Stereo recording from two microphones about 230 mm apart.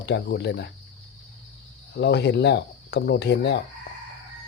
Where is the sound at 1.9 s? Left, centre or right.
Left.